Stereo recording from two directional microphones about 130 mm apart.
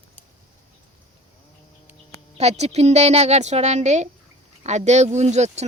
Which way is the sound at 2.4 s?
55° right (ahead or behind).